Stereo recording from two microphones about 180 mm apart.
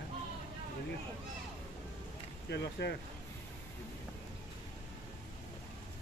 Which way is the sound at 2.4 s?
70° left (ahead or behind).